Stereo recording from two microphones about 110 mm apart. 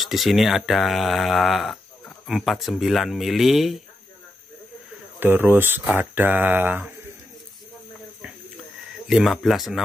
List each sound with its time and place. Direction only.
0.0 s speech: centre (ahead or behind)
5.2 s speech: 20° right (ahead or behind)
9.0 s speech: centre (ahead or behind)